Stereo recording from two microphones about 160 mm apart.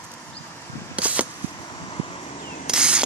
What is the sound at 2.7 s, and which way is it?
Mechanisms, 5° right (ahead or behind).